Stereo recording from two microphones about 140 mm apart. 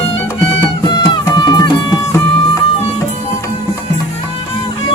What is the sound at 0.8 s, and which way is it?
Music, 30° left (ahead or behind).